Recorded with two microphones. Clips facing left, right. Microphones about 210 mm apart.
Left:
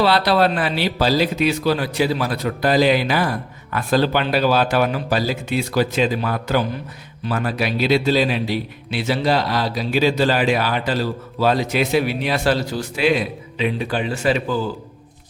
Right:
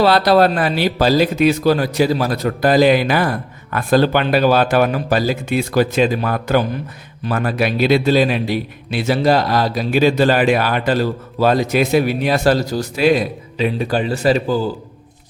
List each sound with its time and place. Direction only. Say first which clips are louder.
0.0 s a man's voice: right 4 dB; 45° right (ahead or behind)